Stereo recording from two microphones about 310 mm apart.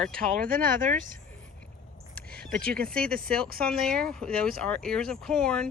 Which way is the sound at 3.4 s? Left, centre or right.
Right.